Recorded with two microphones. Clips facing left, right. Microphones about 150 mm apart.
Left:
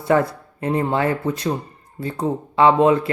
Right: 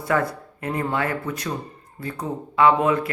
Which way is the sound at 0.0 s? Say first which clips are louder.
Left 5 dB; 25° left (ahead or behind).